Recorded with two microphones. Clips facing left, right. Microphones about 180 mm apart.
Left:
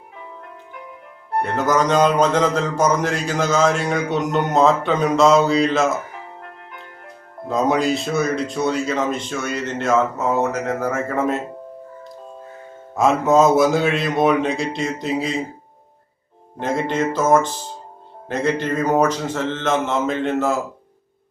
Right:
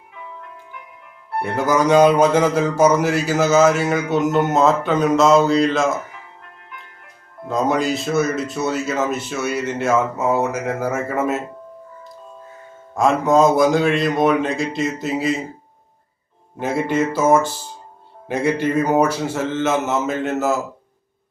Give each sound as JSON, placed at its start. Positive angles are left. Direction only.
{"t": 1.4, "sound": "speech", "side_deg": -10}
{"t": 6.4, "sound": "music", "side_deg": 35}
{"t": 7.4, "sound": "speech", "side_deg": 0}
{"t": 12.9, "sound": "speech", "side_deg": 0}
{"t": 16.6, "sound": "speech", "side_deg": -10}